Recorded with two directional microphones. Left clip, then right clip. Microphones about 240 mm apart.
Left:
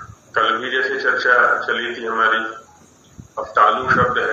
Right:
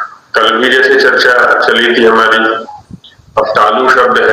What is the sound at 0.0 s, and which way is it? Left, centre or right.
Speech, right.